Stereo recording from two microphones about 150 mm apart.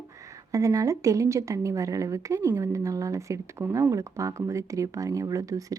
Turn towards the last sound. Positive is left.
turn(degrees=-20)  # may be behind; listen again after turning